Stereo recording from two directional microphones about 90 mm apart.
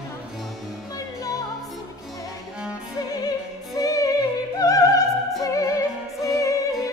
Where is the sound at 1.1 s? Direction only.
40° left (ahead or behind).